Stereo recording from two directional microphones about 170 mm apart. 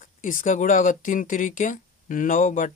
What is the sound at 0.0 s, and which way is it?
Speech, 50° left (ahead or behind).